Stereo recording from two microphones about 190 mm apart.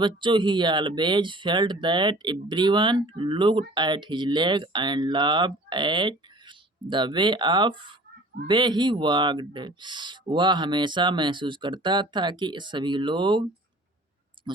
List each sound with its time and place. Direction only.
0.0 s speech: 25° right (ahead or behind)
14.4 s clicking: 25° right (ahead or behind)